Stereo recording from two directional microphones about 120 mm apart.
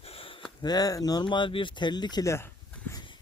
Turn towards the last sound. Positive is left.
turn(degrees=40)  # may be behind; listen again after turning